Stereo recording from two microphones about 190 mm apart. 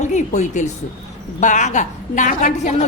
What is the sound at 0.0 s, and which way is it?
A woman's voice, 40° left (ahead or behind).